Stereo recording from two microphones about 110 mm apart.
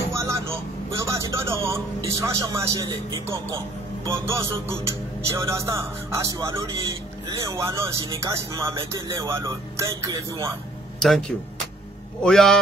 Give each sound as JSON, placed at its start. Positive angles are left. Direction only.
{"t": 0.1, "sound": "a man's voice", "side_deg": -25}
{"t": 11.0, "sound": "a man's voice", "side_deg": 5}